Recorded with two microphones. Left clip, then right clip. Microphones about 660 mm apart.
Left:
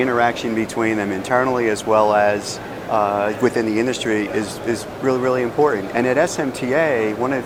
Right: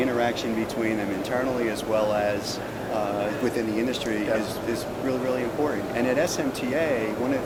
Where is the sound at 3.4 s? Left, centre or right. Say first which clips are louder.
Left 8 dB; left.